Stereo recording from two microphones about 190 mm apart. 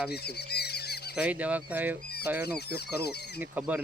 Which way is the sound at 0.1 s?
60° left (ahead or behind).